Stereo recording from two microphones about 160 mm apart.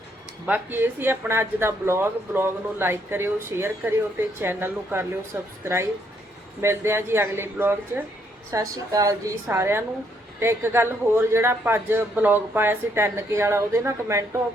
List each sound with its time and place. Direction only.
0.4 s a man's voice: 10° right (ahead or behind)